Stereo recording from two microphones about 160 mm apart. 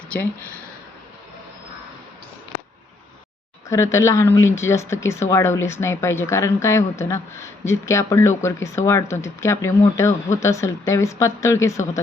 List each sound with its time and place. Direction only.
3.7 s speech: 15° left (ahead or behind)